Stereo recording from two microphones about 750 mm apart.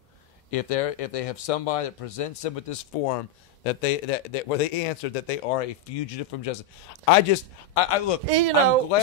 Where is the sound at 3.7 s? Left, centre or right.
Left.